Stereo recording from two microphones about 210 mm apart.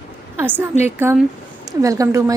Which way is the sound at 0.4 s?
10° right (ahead or behind).